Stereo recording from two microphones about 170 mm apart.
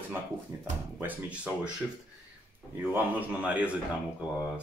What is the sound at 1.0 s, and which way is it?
Speech, 10° right (ahead or behind).